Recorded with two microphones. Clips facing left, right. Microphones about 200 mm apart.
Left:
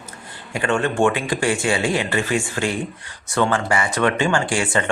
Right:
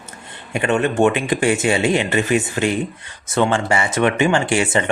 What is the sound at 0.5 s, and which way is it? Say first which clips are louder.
Speech: right 3 dB; 20° right (ahead or behind).